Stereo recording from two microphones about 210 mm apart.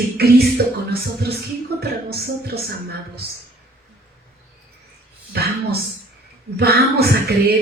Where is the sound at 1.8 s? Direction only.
50° right (ahead or behind).